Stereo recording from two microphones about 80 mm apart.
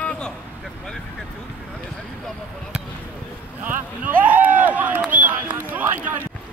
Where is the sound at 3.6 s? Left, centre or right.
Right.